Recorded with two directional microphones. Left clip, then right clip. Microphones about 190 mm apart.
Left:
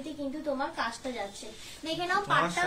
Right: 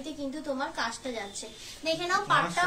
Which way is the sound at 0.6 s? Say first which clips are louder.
Even; 30° right (ahead or behind).